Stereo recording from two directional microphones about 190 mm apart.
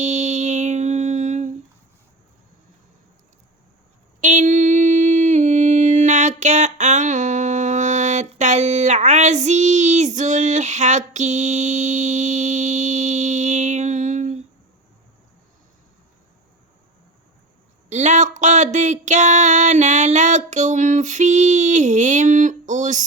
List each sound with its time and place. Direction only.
0.0 s music: 40° right (ahead or behind)
4.2 s mantra: 40° right (ahead or behind)
17.8 s a sound: 40° right (ahead or behind)